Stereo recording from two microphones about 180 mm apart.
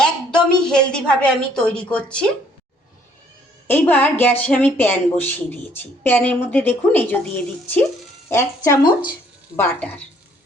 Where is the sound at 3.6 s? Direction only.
10° left (ahead or behind).